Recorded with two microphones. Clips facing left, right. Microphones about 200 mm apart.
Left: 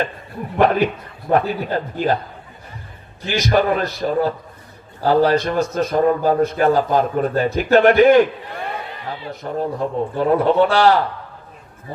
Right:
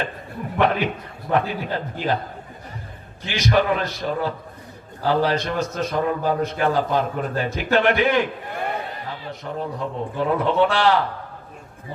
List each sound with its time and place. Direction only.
0.6 s a man's voice: 45° left (ahead or behind)
3.2 s a man's voice: 40° left (ahead or behind)
9.4 s a man's voice: 40° left (ahead or behind)